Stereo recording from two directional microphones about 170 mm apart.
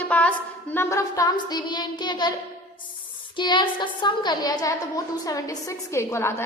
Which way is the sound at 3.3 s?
25° left (ahead or behind).